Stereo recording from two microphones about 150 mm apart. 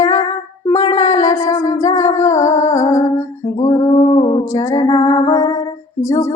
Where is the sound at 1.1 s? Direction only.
20° left (ahead or behind).